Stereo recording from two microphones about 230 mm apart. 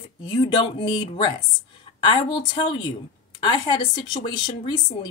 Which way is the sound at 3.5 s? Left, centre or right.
Centre.